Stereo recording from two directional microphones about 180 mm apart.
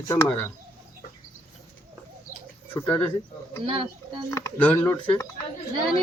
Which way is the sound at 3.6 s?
30° right (ahead or behind).